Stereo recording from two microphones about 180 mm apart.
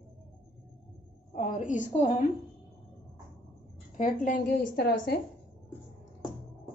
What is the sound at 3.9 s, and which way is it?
A woman's voice, 45° left (ahead or behind).